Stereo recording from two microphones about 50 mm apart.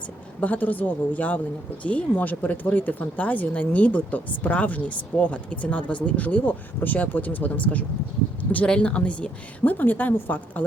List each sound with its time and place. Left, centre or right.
0.3 s speech: left
8.6 s speech: left
9.7 s speech: left